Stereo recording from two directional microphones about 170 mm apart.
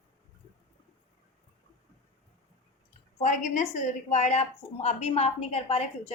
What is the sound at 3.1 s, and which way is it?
A woman's voice, 45° left (ahead or behind).